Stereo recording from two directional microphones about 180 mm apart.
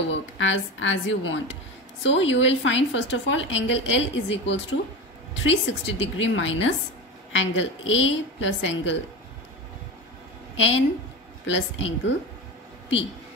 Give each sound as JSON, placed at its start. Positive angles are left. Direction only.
{"t": 0.1, "sound": "a woman's voice", "side_deg": 90}
{"t": 11.4, "sound": "a woman's voice", "side_deg": 90}